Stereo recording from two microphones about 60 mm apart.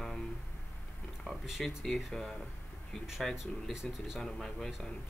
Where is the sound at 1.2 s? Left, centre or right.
Centre.